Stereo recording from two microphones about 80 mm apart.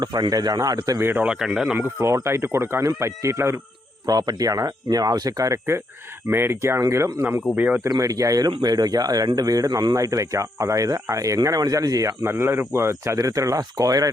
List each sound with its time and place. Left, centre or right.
0.0 s a man's voice: right
1.0 s speech: right
1.3 s speech: centre
2.0 s speech: right
4.0 s speech: right
6.3 s speech: right
7.5 s speech: right
7.9 s speech: right
12.2 s speech: right